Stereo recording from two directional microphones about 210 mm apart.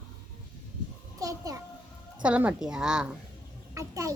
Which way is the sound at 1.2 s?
15° right (ahead or behind).